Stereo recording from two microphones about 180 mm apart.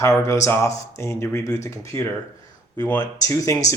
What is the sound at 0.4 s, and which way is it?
Speech, 15° left (ahead or behind).